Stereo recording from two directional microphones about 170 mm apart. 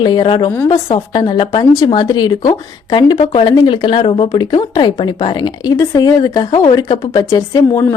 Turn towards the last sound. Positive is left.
turn(degrees=20)  # may be behind; listen again after turning